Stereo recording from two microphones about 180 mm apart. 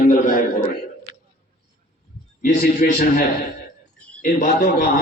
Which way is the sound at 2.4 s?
50° left (ahead or behind).